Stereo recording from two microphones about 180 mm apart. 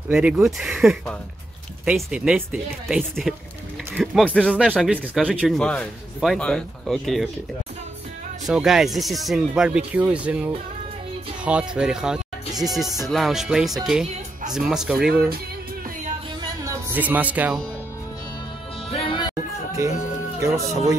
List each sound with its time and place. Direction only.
0.1 s speech: 5° right (ahead or behind)
4.6 s speech: 5° right (ahead or behind)
8.5 s speech: 5° right (ahead or behind)
16.6 s speech: 10° right (ahead or behind)
18.9 s music: 30° left (ahead or behind)